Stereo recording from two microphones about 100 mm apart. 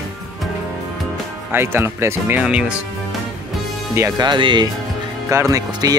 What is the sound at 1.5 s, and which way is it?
Speech, 25° right (ahead or behind).